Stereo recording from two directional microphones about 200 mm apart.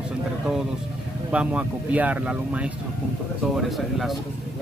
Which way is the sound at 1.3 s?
5° right (ahead or behind).